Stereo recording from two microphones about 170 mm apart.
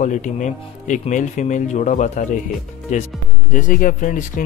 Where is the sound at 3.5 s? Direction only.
50° left (ahead or behind).